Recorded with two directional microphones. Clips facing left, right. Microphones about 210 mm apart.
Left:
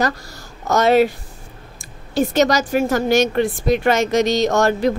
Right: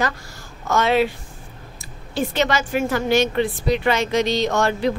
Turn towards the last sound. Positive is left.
turn(degrees=45)  # may be behind; listen again after turning